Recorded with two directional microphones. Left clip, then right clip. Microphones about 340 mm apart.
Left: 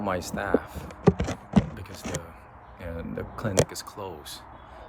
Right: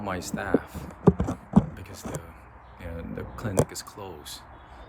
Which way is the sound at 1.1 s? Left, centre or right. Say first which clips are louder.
Even; centre.